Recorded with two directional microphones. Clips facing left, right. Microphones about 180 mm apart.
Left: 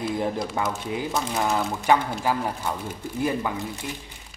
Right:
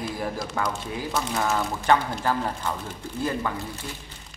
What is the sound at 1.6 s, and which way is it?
Speech, 5° left (ahead or behind).